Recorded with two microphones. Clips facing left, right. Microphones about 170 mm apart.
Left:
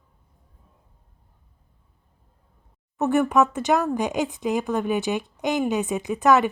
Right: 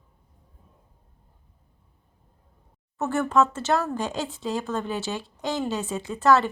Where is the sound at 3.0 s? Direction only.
15° left (ahead or behind).